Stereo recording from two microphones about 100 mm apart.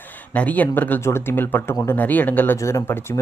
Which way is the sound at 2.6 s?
30° left (ahead or behind).